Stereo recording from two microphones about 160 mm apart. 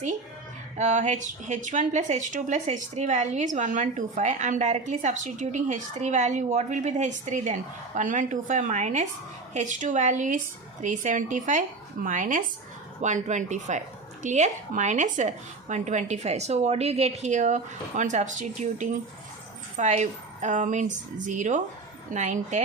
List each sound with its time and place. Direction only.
0.8 s speech: 50° right (ahead or behind)